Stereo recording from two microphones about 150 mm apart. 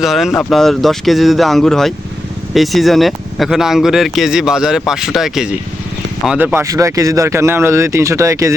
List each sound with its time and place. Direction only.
0.0 s speech: centre (ahead or behind); by 8.5 s 20° right (ahead or behind)